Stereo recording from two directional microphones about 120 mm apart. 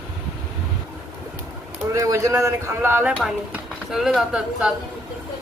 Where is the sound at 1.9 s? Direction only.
25° right (ahead or behind).